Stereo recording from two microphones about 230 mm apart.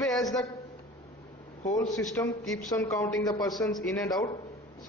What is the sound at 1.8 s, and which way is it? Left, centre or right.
A man's voice, centre.